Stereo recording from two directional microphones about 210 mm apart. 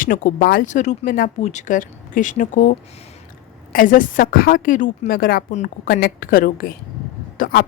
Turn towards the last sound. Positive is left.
turn(degrees=45)  # may be behind; listen again after turning